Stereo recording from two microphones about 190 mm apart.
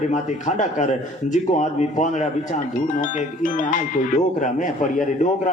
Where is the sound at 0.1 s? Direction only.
40° left (ahead or behind).